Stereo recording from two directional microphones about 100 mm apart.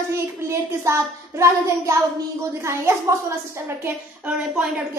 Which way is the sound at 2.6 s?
30° right (ahead or behind).